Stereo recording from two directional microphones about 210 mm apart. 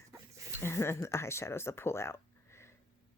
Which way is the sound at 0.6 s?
10° left (ahead or behind).